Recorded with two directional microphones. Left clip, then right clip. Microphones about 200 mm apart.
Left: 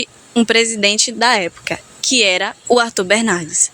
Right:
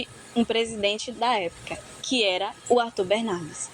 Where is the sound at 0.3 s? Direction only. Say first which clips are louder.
Left 11 dB; 55° left (ahead or behind).